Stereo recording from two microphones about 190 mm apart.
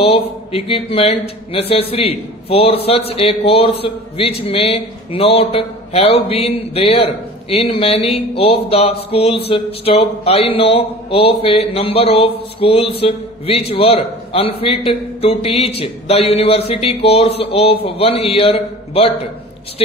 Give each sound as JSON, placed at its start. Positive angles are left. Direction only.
{"t": 0.0, "sound": "a man's voice", "side_deg": 30}